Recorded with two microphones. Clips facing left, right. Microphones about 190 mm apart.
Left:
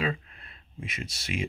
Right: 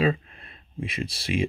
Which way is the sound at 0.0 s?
30° right (ahead or behind).